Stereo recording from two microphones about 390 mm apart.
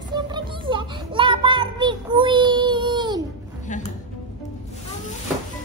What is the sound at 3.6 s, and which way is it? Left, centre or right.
Music, centre.